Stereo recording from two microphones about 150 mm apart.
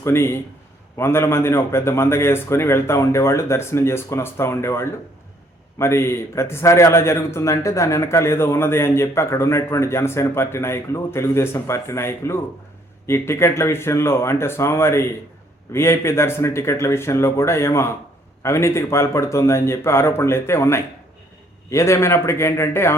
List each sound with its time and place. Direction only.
0.0 s a man's voice: 15° left (ahead or behind)